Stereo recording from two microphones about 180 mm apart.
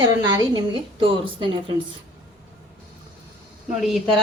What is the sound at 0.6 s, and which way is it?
A woman's voice, 30° right (ahead or behind).